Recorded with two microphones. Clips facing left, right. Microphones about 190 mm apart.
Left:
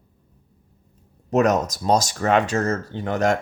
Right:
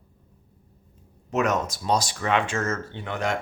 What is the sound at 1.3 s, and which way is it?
Speech, 40° left (ahead or behind).